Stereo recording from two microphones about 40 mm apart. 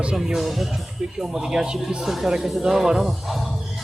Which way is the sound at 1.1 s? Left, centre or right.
Centre.